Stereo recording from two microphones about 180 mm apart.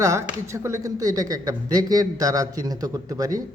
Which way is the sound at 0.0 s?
15° right (ahead or behind).